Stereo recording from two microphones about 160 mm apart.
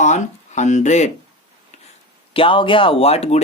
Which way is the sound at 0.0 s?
50° left (ahead or behind).